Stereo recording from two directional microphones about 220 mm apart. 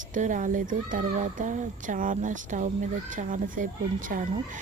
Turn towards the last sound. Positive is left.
turn(degrees=-40)  # may be behind; listen again after turning